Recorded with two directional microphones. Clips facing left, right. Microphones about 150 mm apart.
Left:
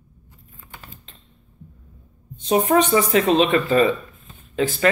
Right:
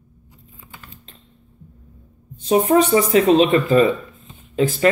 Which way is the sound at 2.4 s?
35° right (ahead or behind).